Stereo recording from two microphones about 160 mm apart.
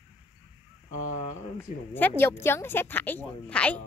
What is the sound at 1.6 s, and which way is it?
Speech, 10° left (ahead or behind).